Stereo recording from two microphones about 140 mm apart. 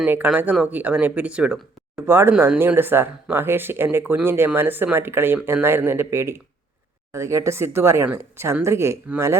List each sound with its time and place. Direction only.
0.0 s speech: 10° right (ahead or behind)